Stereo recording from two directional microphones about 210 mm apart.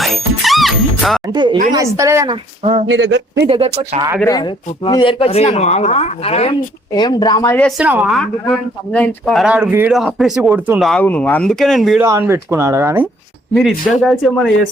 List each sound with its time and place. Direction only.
0.0 s music: centre (ahead or behind)
1.3 s a woman's voice: 20° right (ahead or behind)
2.9 s a man's voice: 60° right (ahead or behind)
3.5 s speech: 30° right (ahead or behind)
4.3 s speech: 20° left (ahead or behind)
7.8 s speech: 5° right (ahead or behind)
12.0 s a woman's voice: 15° right (ahead or behind)
13.5 s speech: centre (ahead or behind)